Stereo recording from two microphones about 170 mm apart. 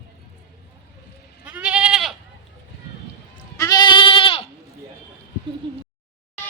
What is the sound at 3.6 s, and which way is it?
Goat, 20° left (ahead or behind).